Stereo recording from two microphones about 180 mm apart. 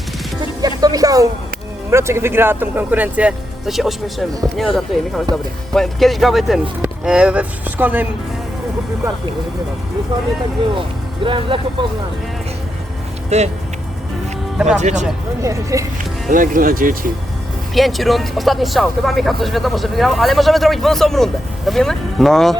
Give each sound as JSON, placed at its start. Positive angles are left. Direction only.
{"t": 0.8, "sound": "speech", "side_deg": -20}
{"t": 10.8, "sound": "speech", "side_deg": -30}
{"t": 13.3, "sound": "speech", "side_deg": -40}
{"t": 14.8, "sound": "speech", "side_deg": -40}
{"t": 15.4, "sound": "speech", "side_deg": -15}
{"t": 16.3, "sound": "speech", "side_deg": -50}
{"t": 17.7, "sound": "speech", "side_deg": 0}